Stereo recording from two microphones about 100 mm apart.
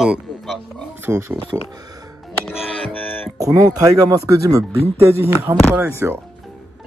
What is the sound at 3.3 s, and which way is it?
Speech, 35° right (ahead or behind).